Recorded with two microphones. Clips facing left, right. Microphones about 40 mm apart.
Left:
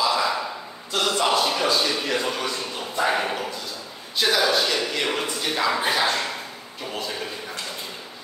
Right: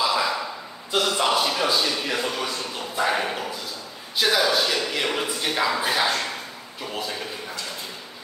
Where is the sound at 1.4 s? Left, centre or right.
Centre.